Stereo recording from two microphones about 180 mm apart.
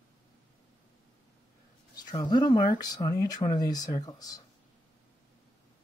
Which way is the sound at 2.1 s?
25° left (ahead or behind).